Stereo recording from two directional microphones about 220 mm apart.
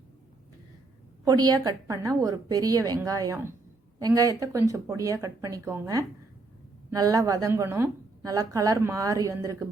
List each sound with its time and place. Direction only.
1.2 s a woman's voice: 15° right (ahead or behind)